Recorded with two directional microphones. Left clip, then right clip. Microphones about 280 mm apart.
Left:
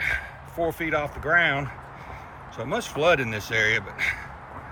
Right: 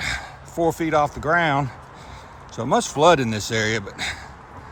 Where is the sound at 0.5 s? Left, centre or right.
Right.